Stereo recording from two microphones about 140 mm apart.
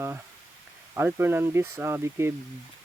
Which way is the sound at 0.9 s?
15° right (ahead or behind).